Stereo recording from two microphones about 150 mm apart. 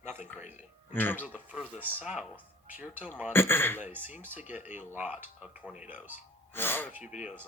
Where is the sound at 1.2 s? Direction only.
10° right (ahead or behind).